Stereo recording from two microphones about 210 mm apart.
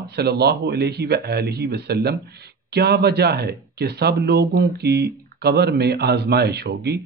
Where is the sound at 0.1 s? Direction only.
50° right (ahead or behind).